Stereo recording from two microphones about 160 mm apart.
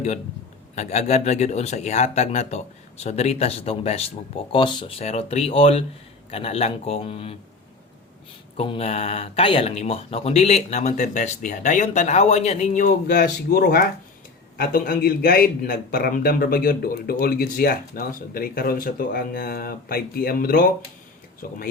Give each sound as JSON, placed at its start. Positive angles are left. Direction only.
{"t": 0.8, "sound": "speech", "side_deg": 45}
{"t": 8.5, "sound": "a man's voice", "side_deg": 35}